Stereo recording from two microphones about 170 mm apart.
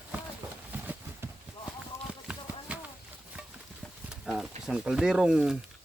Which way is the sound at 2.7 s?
10° right (ahead or behind).